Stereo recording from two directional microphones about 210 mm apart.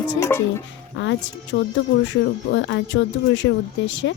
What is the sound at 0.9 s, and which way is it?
Speech, 60° left (ahead or behind).